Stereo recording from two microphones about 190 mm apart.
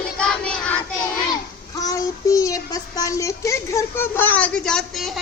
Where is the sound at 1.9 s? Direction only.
15° left (ahead or behind); by 5.2 s centre (ahead or behind).